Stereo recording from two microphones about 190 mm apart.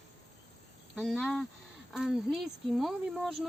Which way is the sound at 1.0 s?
Centre (ahead or behind).